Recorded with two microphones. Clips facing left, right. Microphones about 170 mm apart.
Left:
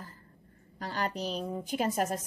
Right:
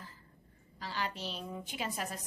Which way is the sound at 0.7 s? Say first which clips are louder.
Left 5 dB; 50° left (ahead or behind).